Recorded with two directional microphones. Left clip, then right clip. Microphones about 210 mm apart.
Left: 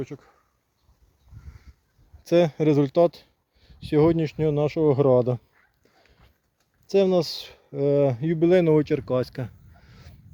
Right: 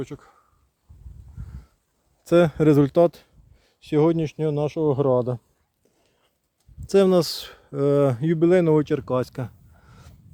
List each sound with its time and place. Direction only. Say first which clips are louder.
0.0 s speech: right 1 dB; centre (ahead or behind)
2.2 s speech: right 2 dB; 15° right (ahead or behind)
3.8 s speech: even; centre (ahead or behind)
6.8 s speech: right 3 dB; 20° right (ahead or behind)
8.4 s speech: even; 5° right (ahead or behind)